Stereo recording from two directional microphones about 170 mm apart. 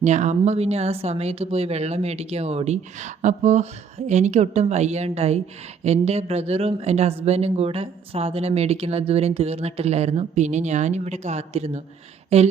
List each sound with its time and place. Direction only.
0.0 s speech: 45° right (ahead or behind)